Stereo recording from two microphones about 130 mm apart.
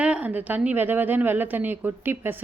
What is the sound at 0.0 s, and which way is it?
A woman's voice, 10° right (ahead or behind).